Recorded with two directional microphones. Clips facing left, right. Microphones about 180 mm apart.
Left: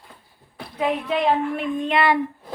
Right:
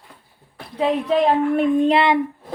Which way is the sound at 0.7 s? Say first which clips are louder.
Right 4 dB; 35° right (ahead or behind).